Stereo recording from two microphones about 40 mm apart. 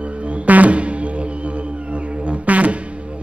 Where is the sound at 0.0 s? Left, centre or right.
Right.